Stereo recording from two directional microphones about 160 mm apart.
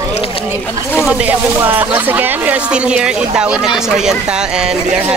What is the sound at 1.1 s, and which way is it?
Speech, 10° right (ahead or behind).